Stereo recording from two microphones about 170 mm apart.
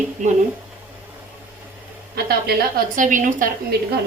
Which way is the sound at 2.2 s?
65° right (ahead or behind).